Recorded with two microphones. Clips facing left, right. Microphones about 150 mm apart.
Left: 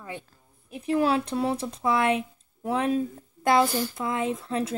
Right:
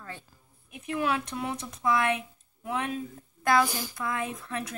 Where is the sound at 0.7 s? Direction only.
35° left (ahead or behind).